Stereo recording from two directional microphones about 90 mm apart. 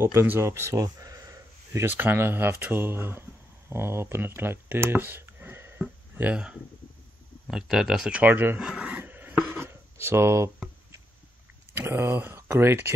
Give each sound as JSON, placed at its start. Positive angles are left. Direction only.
{"t": 0.0, "sound": "speech", "side_deg": -30}
{"t": 8.2, "sound": "speech", "side_deg": -20}
{"t": 8.6, "sound": "filing", "side_deg": -15}
{"t": 11.7, "sound": "speech", "side_deg": -25}